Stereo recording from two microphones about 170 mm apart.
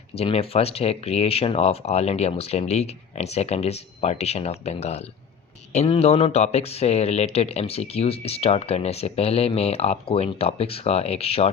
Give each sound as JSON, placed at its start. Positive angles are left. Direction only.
{"t": 0.2, "sound": "speech", "side_deg": 35}